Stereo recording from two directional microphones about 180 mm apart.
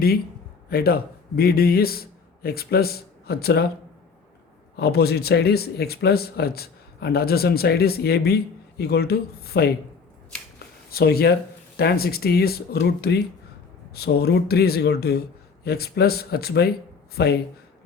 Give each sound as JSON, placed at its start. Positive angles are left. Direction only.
{"t": 0.7, "sound": "a man's voice", "side_deg": 60}
{"t": 4.8, "sound": "speech", "side_deg": 65}
{"t": 10.9, "sound": "speech", "side_deg": 60}